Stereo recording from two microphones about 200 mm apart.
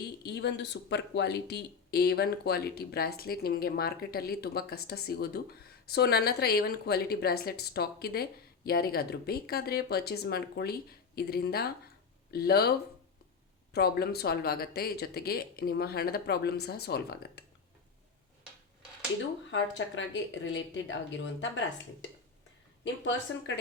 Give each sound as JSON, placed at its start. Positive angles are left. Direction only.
{"t": 0.2, "sound": "a woman's voice", "side_deg": 60}
{"t": 13.7, "sound": "a woman's voice", "side_deg": 55}
{"t": 19.5, "sound": "speech", "side_deg": 65}